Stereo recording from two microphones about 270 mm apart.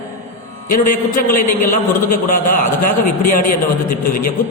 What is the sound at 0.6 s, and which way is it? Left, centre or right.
A man's voice, left.